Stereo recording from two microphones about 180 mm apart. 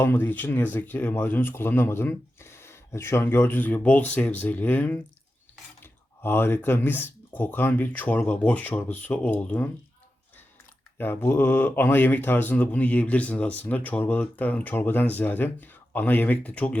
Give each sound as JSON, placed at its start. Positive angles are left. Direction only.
{"t": 0.0, "sound": "speech", "side_deg": 10}
{"t": 10.9, "sound": "speech", "side_deg": 10}